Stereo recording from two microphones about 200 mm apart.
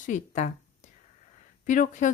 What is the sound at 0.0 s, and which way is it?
Speech, 35° left (ahead or behind).